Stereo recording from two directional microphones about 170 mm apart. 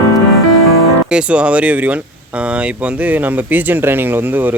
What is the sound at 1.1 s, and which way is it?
Speech, 5° right (ahead or behind).